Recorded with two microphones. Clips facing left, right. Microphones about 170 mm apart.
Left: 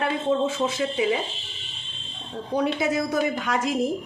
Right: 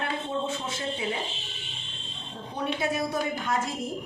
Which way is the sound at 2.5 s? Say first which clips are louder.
Left 6 dB; 90° left.